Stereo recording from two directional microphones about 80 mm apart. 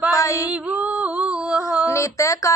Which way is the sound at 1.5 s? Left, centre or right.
Centre.